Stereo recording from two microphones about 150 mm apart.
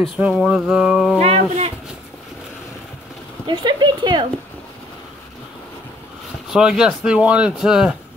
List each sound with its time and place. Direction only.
0.2 s speech: 5° right (ahead or behind)
1.2 s speech: 45° right (ahead or behind)
3.4 s speech: 30° right (ahead or behind)
6.5 s speech: 5° right (ahead or behind)